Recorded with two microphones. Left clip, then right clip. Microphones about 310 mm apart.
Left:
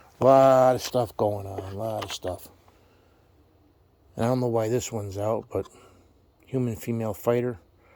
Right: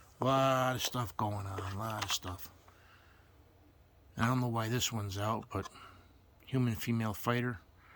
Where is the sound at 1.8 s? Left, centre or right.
Centre.